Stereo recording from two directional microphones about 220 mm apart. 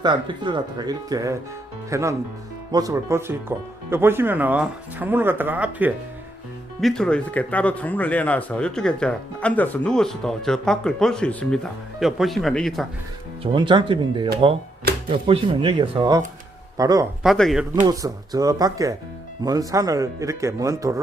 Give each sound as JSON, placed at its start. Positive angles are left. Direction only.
{"t": 0.0, "sound": "speech", "side_deg": -20}
{"t": 6.8, "sound": "speech", "side_deg": 5}
{"t": 13.4, "sound": "speech", "side_deg": -20}
{"t": 17.2, "sound": "speech", "side_deg": 0}
{"t": 17.8, "sound": "speech", "side_deg": -15}